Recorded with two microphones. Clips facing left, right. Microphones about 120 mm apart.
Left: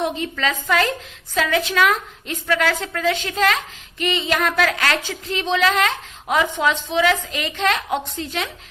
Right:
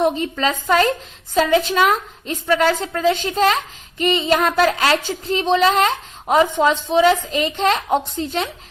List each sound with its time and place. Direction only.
0.0 s a woman's voice: 35° right (ahead or behind)